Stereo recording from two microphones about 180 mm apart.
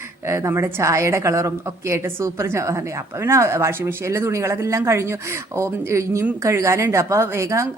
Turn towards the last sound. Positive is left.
turn(degrees=-15)  # may be behind; listen again after turning